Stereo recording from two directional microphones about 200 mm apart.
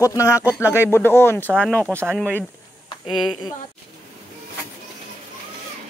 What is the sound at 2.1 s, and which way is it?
Speech, 5° left (ahead or behind).